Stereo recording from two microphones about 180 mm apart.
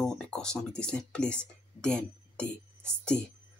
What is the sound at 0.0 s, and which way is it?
Speech, 5° left (ahead or behind).